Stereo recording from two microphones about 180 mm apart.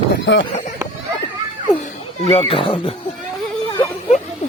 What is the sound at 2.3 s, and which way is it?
Speech, 30° left (ahead or behind).